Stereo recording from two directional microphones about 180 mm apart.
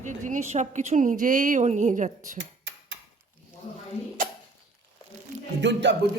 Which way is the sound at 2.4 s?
75° right (ahead or behind).